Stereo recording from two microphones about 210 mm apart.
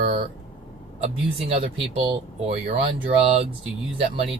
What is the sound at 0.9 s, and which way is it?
Speech, 30° right (ahead or behind).